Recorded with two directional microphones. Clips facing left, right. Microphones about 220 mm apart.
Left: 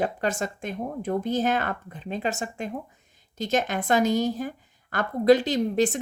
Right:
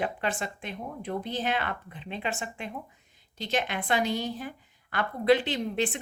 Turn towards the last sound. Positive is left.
turn(degrees=40)  # may be behind; listen again after turning